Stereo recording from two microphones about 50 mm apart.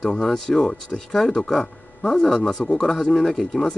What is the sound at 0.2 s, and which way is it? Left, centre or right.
Speech, centre.